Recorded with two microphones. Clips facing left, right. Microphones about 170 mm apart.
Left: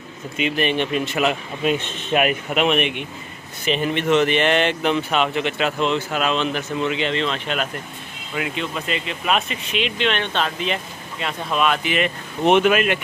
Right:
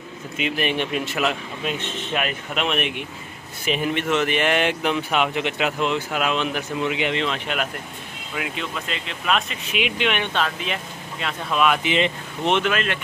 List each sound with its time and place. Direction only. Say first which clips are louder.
0.4 s speech: left 3 dB; 5° right (ahead or behind)
2.1 s speech: left 7 dB; 10° left (ahead or behind)
3.6 s speech: left 2 dB; 5° right (ahead or behind)
8.4 s speech: left 3 dB; centre (ahead or behind)
9.7 s speech: even; 10° right (ahead or behind)
10.4 s speech: left 2 dB; centre (ahead or behind)
11.8 s speech: even; 25° right (ahead or behind)
12.5 s speech: left 7 dB; 10° left (ahead or behind)